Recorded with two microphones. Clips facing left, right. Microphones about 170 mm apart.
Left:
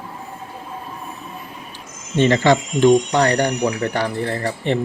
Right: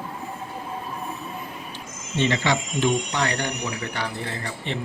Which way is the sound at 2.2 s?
50° left (ahead or behind).